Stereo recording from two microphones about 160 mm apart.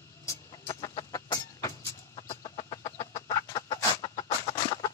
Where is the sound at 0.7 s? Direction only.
25° left (ahead or behind).